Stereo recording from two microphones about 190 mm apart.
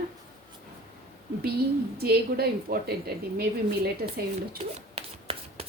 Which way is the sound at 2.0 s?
55° right (ahead or behind).